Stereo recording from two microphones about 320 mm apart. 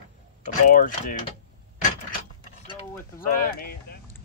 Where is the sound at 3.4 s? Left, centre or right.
Left.